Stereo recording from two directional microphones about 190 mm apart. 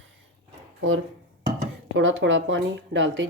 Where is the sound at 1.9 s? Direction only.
80° right.